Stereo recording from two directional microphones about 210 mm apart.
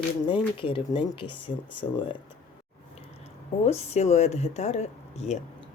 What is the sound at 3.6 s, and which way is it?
Speech, 30° left (ahead or behind).